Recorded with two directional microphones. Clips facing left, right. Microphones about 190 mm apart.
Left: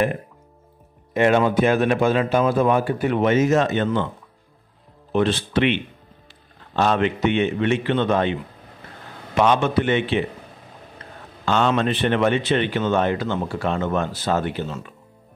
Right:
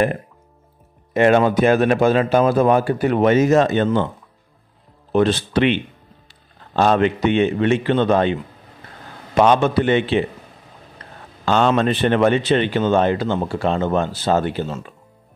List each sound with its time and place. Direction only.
1.1 s speech: 40° right (ahead or behind)
5.1 s speech: 40° right (ahead or behind)
11.4 s speech: 35° right (ahead or behind)